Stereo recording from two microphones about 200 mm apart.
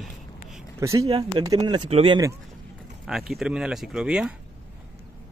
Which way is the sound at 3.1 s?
Centre (ahead or behind).